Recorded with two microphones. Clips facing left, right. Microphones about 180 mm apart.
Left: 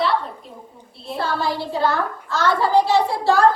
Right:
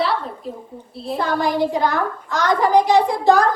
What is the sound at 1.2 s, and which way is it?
A child's voice, 15° right (ahead or behind).